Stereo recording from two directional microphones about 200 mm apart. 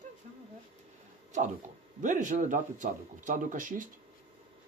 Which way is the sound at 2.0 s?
40° right (ahead or behind).